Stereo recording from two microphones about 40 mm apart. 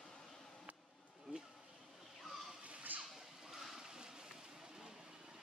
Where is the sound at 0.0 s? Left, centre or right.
Centre.